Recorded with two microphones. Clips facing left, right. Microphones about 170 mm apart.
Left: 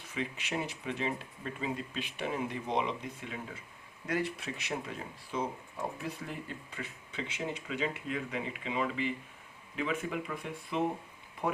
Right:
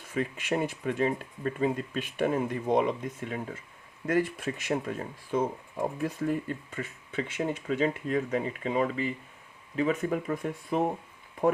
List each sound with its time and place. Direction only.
0.1 s speech: 50° right (ahead or behind)